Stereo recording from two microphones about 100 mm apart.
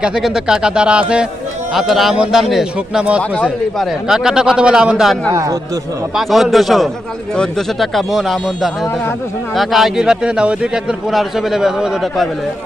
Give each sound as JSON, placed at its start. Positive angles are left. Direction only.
{"t": 0.0, "sound": "a man's voice", "side_deg": -5}
{"t": 3.2, "sound": "a man's voice", "side_deg": 15}
{"t": 3.8, "sound": "a man's voice", "side_deg": -5}
{"t": 5.3, "sound": "a man's voice", "side_deg": -35}
{"t": 6.1, "sound": "a man's voice", "side_deg": 0}